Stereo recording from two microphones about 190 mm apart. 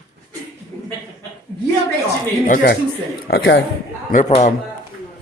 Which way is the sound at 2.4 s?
45° left (ahead or behind).